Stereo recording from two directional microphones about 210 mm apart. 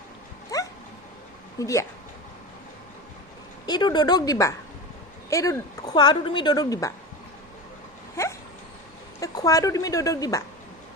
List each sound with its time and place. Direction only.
0.5 s dog: 15° left (ahead or behind)
1.5 s speech: 15° left (ahead or behind)
3.7 s speech: 20° left (ahead or behind)
8.1 s dog: 15° left (ahead or behind)
9.2 s speech: 15° left (ahead or behind)